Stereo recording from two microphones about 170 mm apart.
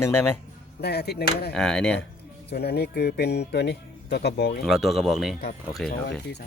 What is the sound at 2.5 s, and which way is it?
Speech, 75° left (ahead or behind).